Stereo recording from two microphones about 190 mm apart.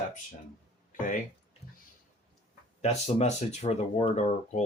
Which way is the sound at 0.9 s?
45° left (ahead or behind).